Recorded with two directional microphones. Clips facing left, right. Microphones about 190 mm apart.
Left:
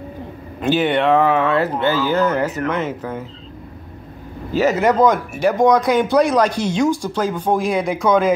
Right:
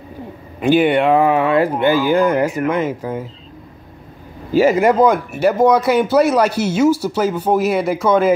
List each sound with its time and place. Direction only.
0.6 s speech: 10° right (ahead or behind)
4.6 s speech: 10° right (ahead or behind)